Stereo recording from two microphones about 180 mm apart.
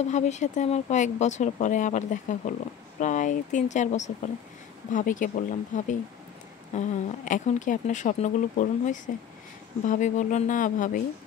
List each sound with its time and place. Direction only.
0.0 s speech: 40° left (ahead or behind)